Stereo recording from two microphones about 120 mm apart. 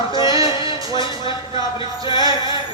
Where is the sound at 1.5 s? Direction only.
45° left (ahead or behind).